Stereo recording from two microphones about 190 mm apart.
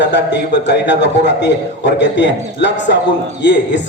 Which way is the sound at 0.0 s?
65° left (ahead or behind).